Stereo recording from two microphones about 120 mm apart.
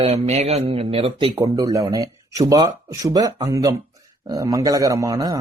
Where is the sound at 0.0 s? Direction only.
60° right (ahead or behind).